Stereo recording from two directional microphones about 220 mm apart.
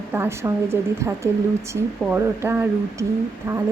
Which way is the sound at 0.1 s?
10° right (ahead or behind).